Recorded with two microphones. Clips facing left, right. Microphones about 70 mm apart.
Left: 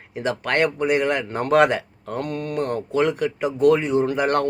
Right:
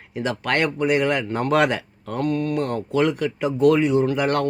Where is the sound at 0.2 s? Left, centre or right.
Left.